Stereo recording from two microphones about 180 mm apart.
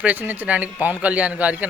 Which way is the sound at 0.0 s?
10° right (ahead or behind).